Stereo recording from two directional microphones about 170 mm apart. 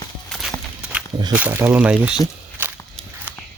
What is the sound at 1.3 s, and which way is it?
Speech, 10° right (ahead or behind).